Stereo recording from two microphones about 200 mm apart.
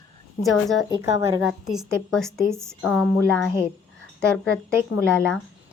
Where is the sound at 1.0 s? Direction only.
15° right (ahead or behind).